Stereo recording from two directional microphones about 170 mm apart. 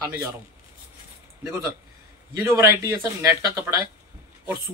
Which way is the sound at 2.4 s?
15° right (ahead or behind).